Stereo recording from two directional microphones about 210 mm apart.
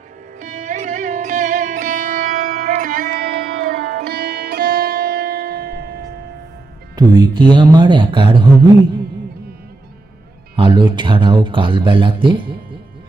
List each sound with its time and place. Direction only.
0.3 s music: 35° right (ahead or behind)
6.9 s speech: 20° right (ahead or behind)
10.6 s speech: 20° right (ahead or behind)